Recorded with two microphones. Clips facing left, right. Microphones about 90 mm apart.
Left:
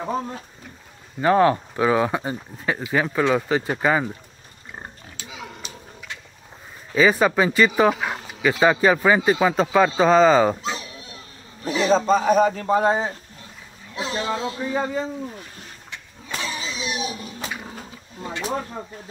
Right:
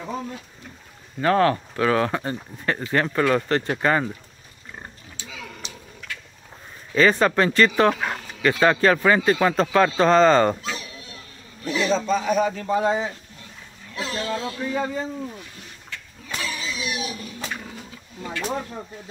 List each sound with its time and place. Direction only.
0.0 s a man's voice: 40° left (ahead or behind)
1.2 s speech: 15° left (ahead or behind)
5.3 s a sound: 20° left (ahead or behind)
7.0 s speech: 5° left (ahead or behind)
10.6 s dog: 25° left (ahead or behind)
12.1 s a man's voice: 40° left (ahead or behind)
13.9 s a man's voice: 25° left (ahead or behind)
16.3 s a sound: 25° left (ahead or behind)